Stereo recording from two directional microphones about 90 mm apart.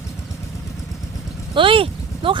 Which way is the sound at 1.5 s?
75° right (ahead or behind).